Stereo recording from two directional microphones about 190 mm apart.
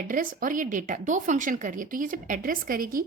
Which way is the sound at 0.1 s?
45° right (ahead or behind).